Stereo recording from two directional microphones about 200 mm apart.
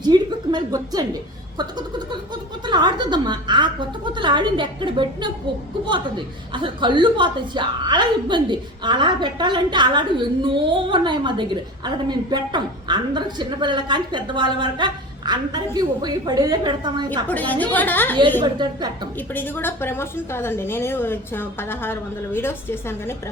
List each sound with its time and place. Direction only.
0.0 s a sound: 20° right (ahead or behind)
2.6 s a woman's voice: 20° right (ahead or behind)
17.2 s a woman's voice: 10° left (ahead or behind)
18.4 s a woman's voice: 20° right (ahead or behind)
19.3 s a woman's voice: 10° left (ahead or behind)